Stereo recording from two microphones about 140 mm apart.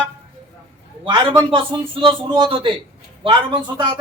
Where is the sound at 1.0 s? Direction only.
35° right (ahead or behind).